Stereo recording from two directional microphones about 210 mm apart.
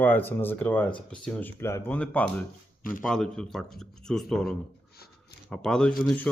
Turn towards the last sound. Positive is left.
turn(degrees=10)  # may be behind; listen again after turning